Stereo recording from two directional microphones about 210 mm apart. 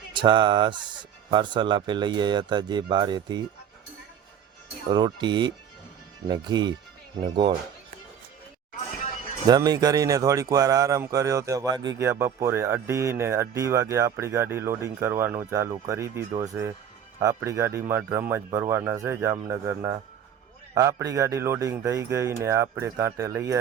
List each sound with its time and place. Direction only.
0.1 s speech: 20° right (ahead or behind)
4.9 s speech: 20° right (ahead or behind)
9.5 s speech: 15° right (ahead or behind)